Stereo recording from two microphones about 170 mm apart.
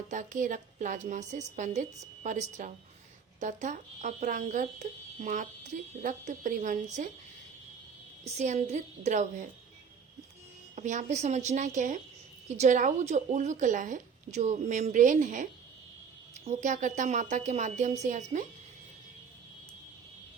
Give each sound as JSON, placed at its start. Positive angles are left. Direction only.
{"t": 0.1, "sound": "speech", "side_deg": -50}
{"t": 8.4, "sound": "speech", "side_deg": -40}
{"t": 10.8, "sound": "speech", "side_deg": -45}
{"t": 16.5, "sound": "speech", "side_deg": -45}